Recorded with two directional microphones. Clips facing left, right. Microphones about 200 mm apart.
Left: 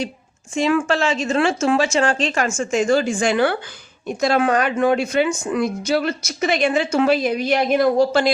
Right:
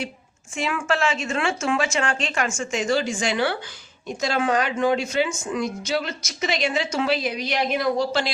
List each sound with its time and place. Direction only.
0.5 s speech: 35° left (ahead or behind)